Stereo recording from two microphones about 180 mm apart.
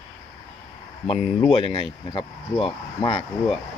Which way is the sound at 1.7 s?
30° left (ahead or behind).